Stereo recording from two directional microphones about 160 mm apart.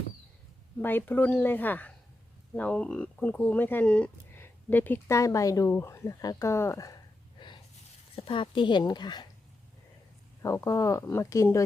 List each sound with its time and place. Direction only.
0.8 s speech: 10° left (ahead or behind)
7.3 s a sound: 30° left (ahead or behind)
8.1 s speech: 30° left (ahead or behind)
10.4 s speech: 20° left (ahead or behind)